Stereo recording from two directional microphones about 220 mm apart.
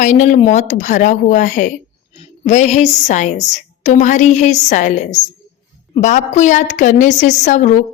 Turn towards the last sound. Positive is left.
turn(degrees=35)  # may be behind; listen again after turning